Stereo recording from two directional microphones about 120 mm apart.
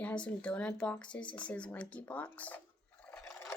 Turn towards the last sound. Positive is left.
turn(degrees=15)  # may be behind; listen again after turning